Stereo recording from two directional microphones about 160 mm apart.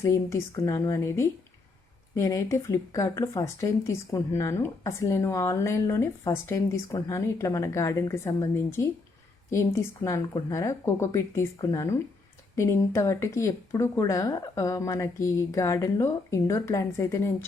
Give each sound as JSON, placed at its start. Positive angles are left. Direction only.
{"t": 0.0, "sound": "a woman's voice", "side_deg": 15}